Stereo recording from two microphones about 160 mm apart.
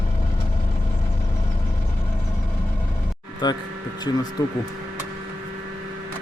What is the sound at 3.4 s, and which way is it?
Speech, 25° left (ahead or behind).